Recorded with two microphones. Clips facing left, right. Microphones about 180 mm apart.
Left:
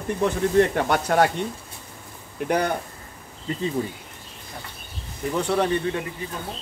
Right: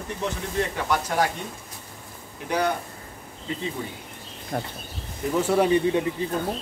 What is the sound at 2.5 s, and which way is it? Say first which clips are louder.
Speech: left 1 dB; 55° left (ahead or behind).